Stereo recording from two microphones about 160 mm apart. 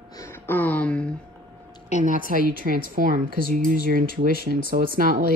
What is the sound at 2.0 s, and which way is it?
A woman's voice, 55° right (ahead or behind).